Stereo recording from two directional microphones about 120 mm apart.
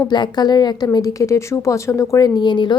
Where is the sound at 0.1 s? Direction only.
35° left (ahead or behind).